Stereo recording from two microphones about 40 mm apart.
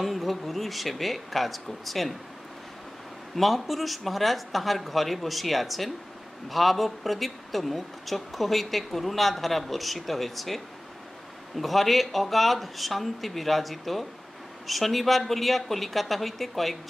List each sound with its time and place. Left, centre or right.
0.0 s speech: centre
3.3 s speech: centre